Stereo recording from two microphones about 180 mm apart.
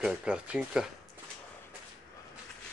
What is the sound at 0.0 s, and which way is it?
Speech, 5° right (ahead or behind).